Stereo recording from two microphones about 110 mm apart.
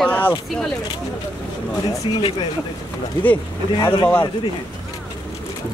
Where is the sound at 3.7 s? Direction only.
40° left (ahead or behind).